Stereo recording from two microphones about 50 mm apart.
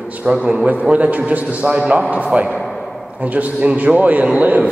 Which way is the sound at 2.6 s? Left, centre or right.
Centre.